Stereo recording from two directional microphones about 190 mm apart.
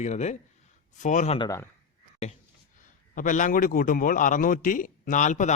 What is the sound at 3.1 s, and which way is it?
Speech, 40° left (ahead or behind).